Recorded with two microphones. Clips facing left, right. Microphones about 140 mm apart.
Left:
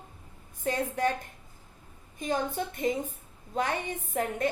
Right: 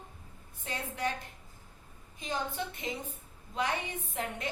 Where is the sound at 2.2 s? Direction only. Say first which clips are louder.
Left 5 dB; 50° left (ahead or behind).